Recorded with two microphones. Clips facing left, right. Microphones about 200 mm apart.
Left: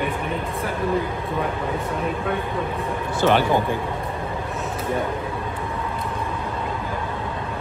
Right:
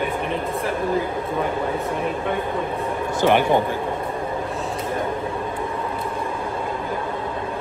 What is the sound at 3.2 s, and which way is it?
Speech, 15° right (ahead or behind).